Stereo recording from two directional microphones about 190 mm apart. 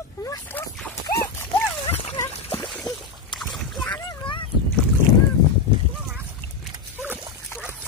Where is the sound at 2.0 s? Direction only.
30° left (ahead or behind).